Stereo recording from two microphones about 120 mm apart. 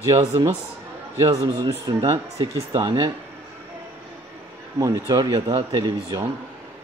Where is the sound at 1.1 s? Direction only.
30° right (ahead or behind).